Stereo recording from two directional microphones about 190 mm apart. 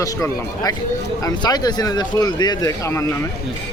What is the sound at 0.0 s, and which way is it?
Speech, 20° left (ahead or behind).